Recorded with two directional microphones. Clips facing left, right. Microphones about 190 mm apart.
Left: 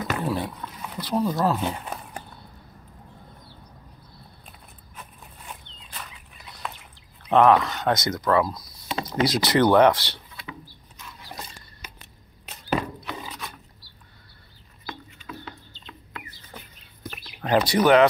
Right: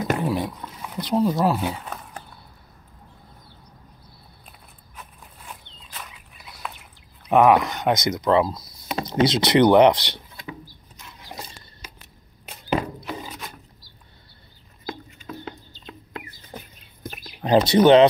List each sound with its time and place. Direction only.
0.2 s speech: 15° right (ahead or behind)
5.9 s dog: 5° right (ahead or behind)
7.2 s speech: 15° right (ahead or behind)
8.5 s a sound: 5° right (ahead or behind)
9.1 s speech: 20° right (ahead or behind)
10.4 s a sound: 15° right (ahead or behind)
14.9 s bird: 45° right (ahead or behind)
17.0 s a sound: 45° right (ahead or behind)
17.4 s speech: 20° right (ahead or behind)